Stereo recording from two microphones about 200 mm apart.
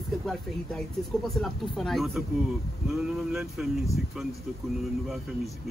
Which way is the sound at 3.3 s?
5° right (ahead or behind).